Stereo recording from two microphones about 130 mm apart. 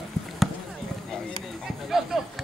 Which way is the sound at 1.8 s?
Centre (ahead or behind).